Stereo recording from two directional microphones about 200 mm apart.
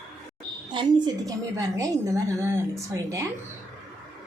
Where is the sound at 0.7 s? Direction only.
20° right (ahead or behind).